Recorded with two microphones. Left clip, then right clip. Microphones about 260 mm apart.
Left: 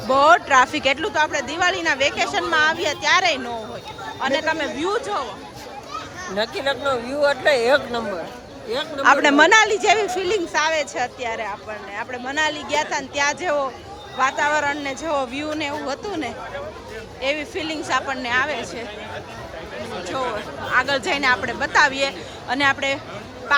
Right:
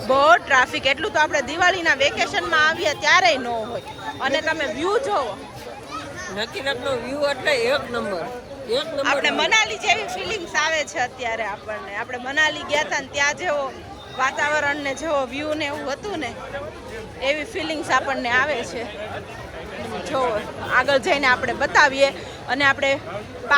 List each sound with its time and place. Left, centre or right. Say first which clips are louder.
0.1 s speech: left 1 dB; centre
6.3 s speech: left 3 dB; left
9.0 s a woman's voice: left 8 dB; left; by 18.9 s centre
20.7 s speech: right 2 dB; centre